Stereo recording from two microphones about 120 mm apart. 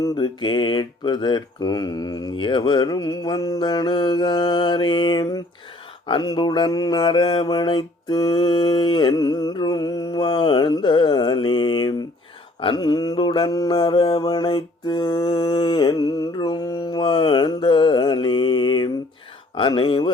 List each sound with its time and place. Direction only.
0.0 s mantra: 35° left (ahead or behind)
19.5 s speech: 45° left (ahead or behind)